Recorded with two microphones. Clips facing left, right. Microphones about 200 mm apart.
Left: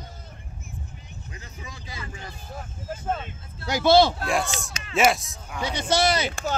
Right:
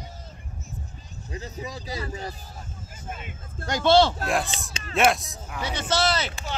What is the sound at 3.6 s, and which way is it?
Speech, 10° left (ahead or behind).